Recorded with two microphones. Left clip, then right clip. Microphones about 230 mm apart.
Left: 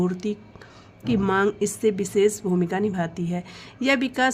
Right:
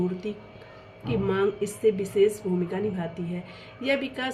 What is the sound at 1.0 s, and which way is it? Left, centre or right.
Speech, left.